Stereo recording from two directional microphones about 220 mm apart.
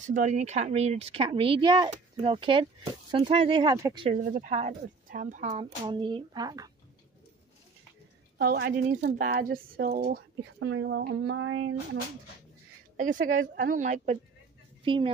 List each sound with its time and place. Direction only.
0.0 s speech: 35° right (ahead or behind); by 4.1 s 15° right (ahead or behind)
4.1 s a woman's voice: 35° right (ahead or behind)
5.9 s speech: 20° right (ahead or behind)
8.4 s a woman's voice: 45° right (ahead or behind)
10.7 s speech: 60° right (ahead or behind)
12.9 s a woman's voice: 35° right (ahead or behind)